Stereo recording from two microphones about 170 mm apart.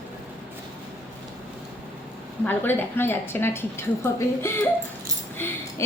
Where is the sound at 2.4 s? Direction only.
10° left (ahead or behind).